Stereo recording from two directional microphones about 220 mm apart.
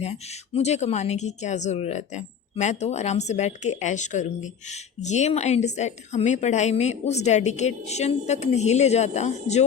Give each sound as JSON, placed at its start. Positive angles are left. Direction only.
{"t": 0.0, "sound": "a woman's voice", "side_deg": 30}